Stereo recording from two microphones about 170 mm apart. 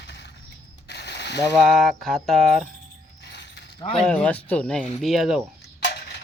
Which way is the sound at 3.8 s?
35° left (ahead or behind).